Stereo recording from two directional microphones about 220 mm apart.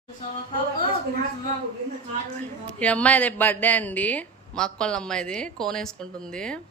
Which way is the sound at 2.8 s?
5° left (ahead or behind).